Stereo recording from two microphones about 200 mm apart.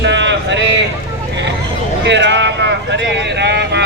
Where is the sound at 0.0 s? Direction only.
60° right (ahead or behind).